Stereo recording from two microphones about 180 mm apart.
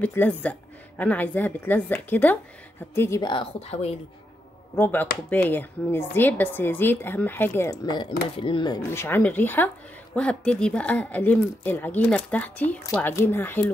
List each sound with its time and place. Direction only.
0.0 s a woman's voice: 10° left (ahead or behind); by 3.9 s 35° left (ahead or behind)
4.7 s speech: 10° left (ahead or behind)